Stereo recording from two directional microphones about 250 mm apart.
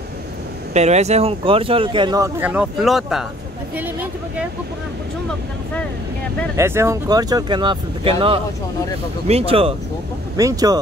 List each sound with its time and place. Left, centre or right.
0.7 s speech: right; by 4.5 s centre
6.5 s speech: centre